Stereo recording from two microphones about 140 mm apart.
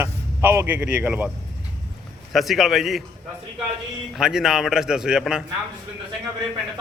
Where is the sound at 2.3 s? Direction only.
Centre (ahead or behind).